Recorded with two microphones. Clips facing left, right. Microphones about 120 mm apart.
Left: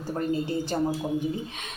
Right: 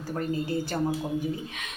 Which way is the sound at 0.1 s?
25° left (ahead or behind).